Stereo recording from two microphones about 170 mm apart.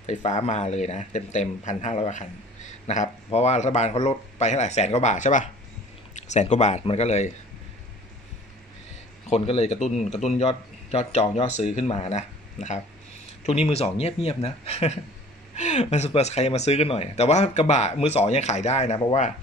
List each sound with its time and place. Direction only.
0.0 s speech: 45° left (ahead or behind)
9.3 s speech: 40° left (ahead or behind)